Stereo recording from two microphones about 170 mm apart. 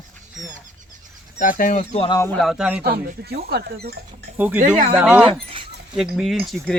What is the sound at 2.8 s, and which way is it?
Speech, 65° right (ahead or behind).